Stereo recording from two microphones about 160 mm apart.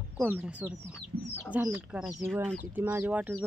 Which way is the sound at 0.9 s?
15° left (ahead or behind).